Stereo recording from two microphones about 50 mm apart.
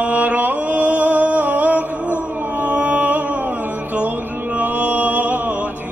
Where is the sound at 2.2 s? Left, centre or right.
Right.